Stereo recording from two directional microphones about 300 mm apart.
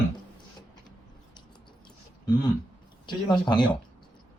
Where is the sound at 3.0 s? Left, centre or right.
Centre.